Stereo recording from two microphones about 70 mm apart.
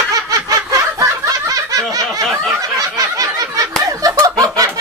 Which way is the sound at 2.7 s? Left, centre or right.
Right.